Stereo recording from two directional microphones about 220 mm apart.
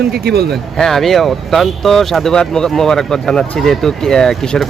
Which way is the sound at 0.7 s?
Centre (ahead or behind).